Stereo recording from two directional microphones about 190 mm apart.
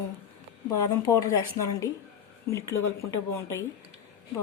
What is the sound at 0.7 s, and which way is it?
A woman's voice, 15° left (ahead or behind).